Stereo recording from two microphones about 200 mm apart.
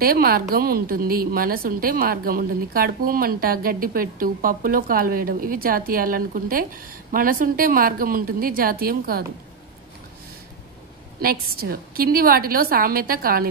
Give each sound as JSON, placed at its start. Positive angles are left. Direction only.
{"t": 0.0, "sound": "a woman's voice", "side_deg": -50}
{"t": 11.1, "sound": "a woman's voice", "side_deg": -45}